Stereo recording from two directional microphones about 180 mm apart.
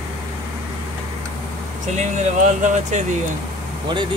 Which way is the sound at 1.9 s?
40° right (ahead or behind).